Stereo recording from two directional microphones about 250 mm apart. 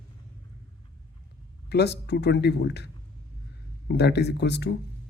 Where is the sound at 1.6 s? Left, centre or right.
Left.